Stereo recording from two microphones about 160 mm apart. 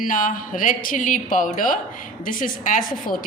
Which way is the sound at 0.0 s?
55° left (ahead or behind).